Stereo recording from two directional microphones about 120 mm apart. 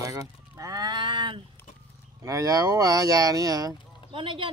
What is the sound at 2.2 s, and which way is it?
Speech, 30° right (ahead or behind).